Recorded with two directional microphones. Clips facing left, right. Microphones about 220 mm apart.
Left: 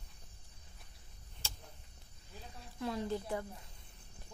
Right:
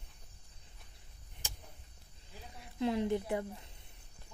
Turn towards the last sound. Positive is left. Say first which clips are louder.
# right 4 dB
turn(degrees=-20)  # may be behind; listen again after turning